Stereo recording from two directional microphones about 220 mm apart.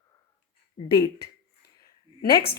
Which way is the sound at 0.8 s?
30° left (ahead or behind).